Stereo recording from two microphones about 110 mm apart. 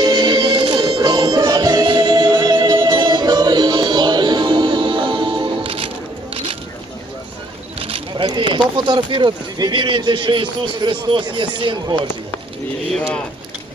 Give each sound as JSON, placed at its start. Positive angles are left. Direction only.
{"t": 0.0, "sound": "music", "side_deg": -40}
{"t": 7.8, "sound": "speech", "side_deg": -55}